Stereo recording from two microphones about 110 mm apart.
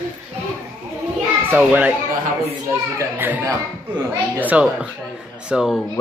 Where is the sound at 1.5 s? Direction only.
15° right (ahead or behind).